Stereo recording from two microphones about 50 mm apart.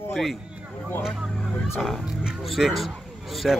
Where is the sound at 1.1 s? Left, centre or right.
Centre.